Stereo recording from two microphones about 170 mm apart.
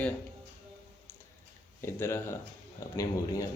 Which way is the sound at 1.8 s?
15° left (ahead or behind).